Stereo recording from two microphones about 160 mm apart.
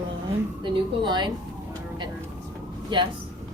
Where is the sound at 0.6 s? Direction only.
30° right (ahead or behind).